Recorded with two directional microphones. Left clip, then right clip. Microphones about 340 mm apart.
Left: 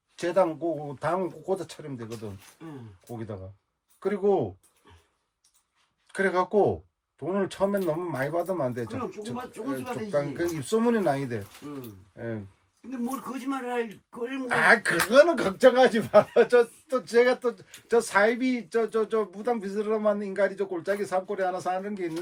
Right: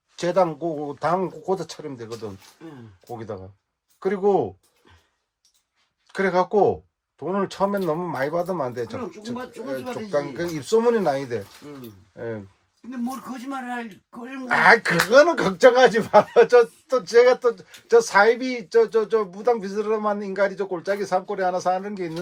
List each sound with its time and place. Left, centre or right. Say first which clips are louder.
0.2 s speech: right 4 dB; centre
4.0 s speech: right 4 dB; centre
6.1 s speech: right 4 dB; centre
13.5 s speech: left 1 dB; centre
14.4 s speech: right 5 dB; centre